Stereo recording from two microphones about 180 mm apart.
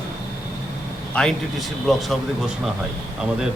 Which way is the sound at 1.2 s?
5° left (ahead or behind).